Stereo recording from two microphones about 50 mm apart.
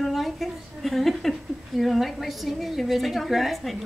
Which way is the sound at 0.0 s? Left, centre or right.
Centre.